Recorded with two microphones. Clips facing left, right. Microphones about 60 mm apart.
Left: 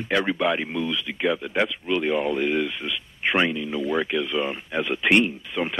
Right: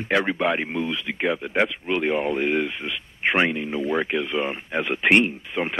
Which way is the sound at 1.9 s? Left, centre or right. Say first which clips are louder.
Even; right.